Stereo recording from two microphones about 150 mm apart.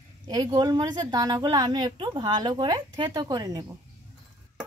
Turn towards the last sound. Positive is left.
turn(degrees=-25)  # may be behind; listen again after turning